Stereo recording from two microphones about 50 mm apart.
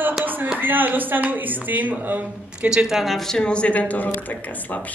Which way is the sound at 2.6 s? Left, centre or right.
Centre.